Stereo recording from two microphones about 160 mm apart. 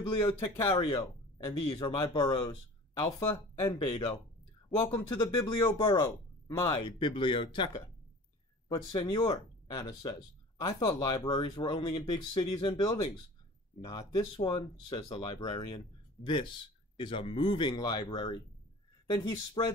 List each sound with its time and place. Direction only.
0.7 s speech: 35° left (ahead or behind)
3.2 s speech: 15° left (ahead or behind)
3.8 s speech: 35° left (ahead or behind)